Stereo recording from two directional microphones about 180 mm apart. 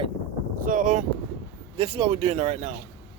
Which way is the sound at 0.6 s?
50° right (ahead or behind).